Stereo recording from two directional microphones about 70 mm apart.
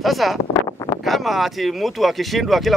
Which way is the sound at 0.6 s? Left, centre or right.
Left.